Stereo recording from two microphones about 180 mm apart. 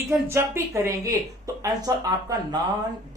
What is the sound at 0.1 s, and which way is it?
Speech, 15° right (ahead or behind).